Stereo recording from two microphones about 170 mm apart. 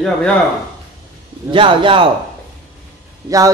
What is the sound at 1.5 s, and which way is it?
Speech, 30° right (ahead or behind).